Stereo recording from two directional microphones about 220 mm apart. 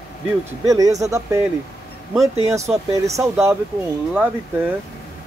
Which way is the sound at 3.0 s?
15° right (ahead or behind).